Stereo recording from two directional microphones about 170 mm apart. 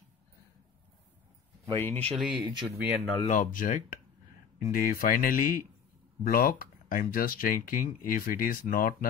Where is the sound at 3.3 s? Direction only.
50° left (ahead or behind).